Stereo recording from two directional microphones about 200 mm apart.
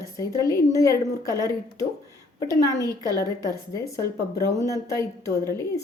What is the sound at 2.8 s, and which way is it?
Speech, 20° right (ahead or behind).